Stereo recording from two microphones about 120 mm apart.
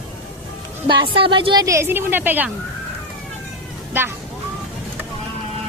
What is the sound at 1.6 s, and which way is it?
Speech, 25° right (ahead or behind).